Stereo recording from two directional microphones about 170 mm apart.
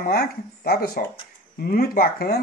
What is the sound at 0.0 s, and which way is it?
Speech, 65° left (ahead or behind).